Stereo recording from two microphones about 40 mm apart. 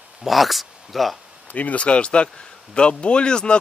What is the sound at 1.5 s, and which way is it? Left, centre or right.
Speech, left.